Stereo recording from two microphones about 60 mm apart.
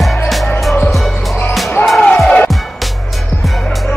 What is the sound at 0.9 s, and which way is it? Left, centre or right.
Music, centre.